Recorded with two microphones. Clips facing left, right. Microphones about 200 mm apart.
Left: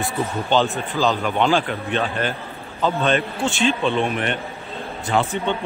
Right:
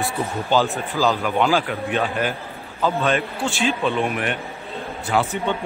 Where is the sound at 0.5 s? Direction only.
5° right (ahead or behind).